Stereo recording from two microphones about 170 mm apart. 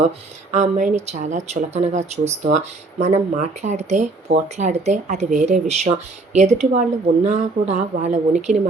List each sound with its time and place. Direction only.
0.5 s speech: 45° right (ahead or behind)